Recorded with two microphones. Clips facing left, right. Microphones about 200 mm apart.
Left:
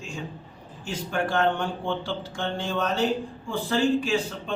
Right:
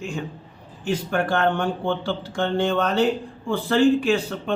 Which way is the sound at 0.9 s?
60° right (ahead or behind).